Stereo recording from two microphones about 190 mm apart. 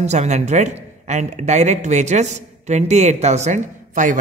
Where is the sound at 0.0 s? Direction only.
35° right (ahead or behind).